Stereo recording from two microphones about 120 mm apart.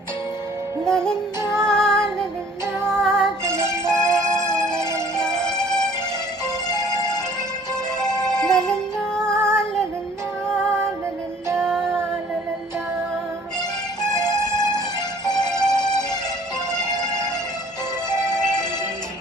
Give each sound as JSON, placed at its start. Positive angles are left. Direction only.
{"t": 0.9, "sound": "music", "side_deg": 5}
{"t": 1.4, "sound": "music", "side_deg": -25}
{"t": 1.6, "sound": "female singing", "side_deg": 5}
{"t": 3.0, "sound": "music", "side_deg": 5}
{"t": 3.4, "sound": "music", "side_deg": -20}
{"t": 3.8, "sound": "music", "side_deg": 5}
{"t": 6.4, "sound": "music", "side_deg": 35}
{"t": 8.3, "sound": "music", "side_deg": 5}
{"t": 9.5, "sound": "female singing", "side_deg": 5}
{"t": 10.4, "sound": "music", "side_deg": 5}
{"t": 14.1, "sound": "music", "side_deg": 30}
{"t": 15.4, "sound": "music", "side_deg": 5}